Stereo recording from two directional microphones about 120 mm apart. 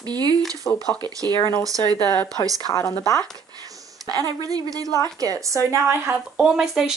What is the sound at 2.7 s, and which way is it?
Speech, 25° left (ahead or behind).